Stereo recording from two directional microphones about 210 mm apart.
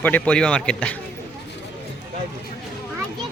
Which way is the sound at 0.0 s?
5° left (ahead or behind).